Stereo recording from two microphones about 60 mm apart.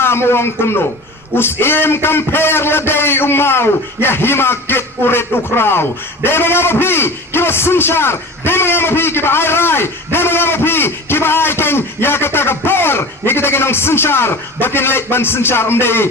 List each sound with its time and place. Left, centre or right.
0.0 s a man's voice: left